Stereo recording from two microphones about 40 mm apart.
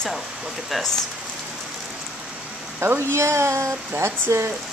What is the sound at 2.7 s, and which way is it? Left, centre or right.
Speech, right.